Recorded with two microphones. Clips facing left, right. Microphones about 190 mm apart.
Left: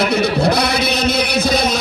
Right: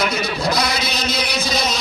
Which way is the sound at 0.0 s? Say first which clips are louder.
Left 6 dB; 60° left (ahead or behind).